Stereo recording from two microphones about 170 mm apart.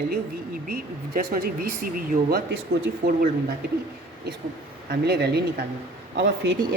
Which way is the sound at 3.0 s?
50° right (ahead or behind).